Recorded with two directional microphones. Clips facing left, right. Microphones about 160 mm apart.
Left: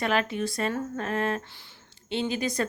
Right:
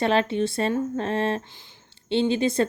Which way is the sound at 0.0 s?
30° right (ahead or behind).